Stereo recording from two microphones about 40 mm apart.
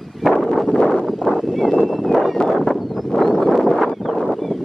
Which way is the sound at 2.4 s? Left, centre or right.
Left.